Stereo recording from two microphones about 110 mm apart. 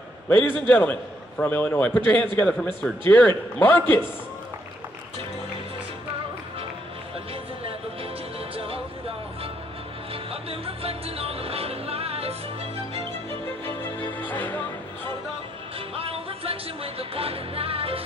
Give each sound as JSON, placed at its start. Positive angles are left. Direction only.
{"t": 0.3, "sound": "a man's voice", "side_deg": 15}
{"t": 8.5, "sound": "music", "side_deg": -60}
{"t": 10.1, "sound": "music", "side_deg": -60}
{"t": 13.7, "sound": "music", "side_deg": 20}
{"t": 15.9, "sound": "music", "side_deg": -60}